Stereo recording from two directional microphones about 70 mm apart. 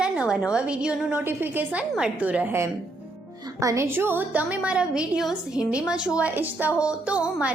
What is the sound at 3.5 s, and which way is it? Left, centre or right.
Speech, right.